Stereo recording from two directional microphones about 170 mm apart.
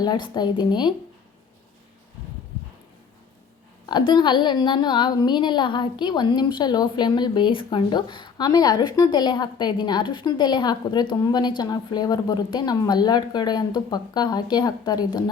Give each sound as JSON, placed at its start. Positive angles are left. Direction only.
{"t": 0.0, "sound": "a woman's voice", "side_deg": 25}
{"t": 3.8, "sound": "a woman's voice", "side_deg": 25}